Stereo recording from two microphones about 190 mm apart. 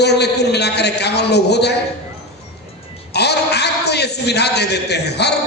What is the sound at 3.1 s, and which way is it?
A man's voice, 60° left (ahead or behind).